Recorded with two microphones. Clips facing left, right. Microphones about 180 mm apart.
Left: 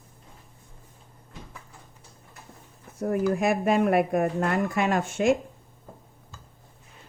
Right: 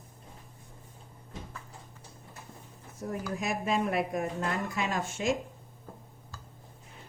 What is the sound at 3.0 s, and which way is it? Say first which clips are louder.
Speech: left 10 dB; 60° left (ahead or behind).